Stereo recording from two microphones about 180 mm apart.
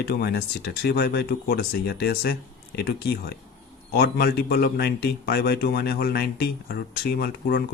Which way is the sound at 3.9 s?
60° left (ahead or behind).